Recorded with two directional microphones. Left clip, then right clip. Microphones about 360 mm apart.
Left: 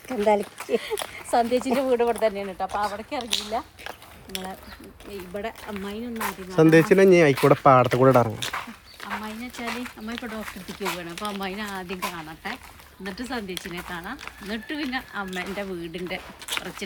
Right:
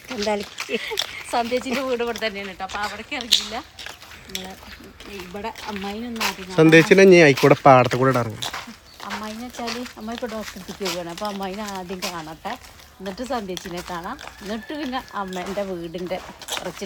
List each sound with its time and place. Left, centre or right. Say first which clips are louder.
0.2 s speech: left 3 dB; centre
6.1 s speech: right 3 dB; centre
8.5 s a sound: left 1 dB; centre
9.2 s speech: right 2 dB; centre